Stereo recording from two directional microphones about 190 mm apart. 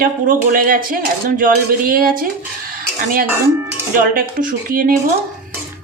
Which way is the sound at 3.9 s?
45° right (ahead or behind).